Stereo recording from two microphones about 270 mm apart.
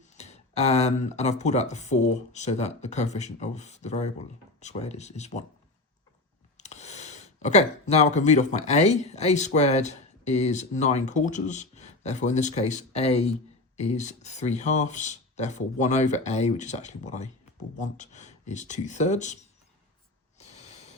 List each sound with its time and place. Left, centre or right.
0.1 s speech: left
6.6 s speech: left
20.4 s a sound: left